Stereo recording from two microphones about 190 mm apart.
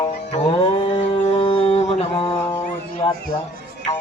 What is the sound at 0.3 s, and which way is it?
Mantra, 35° left (ahead or behind).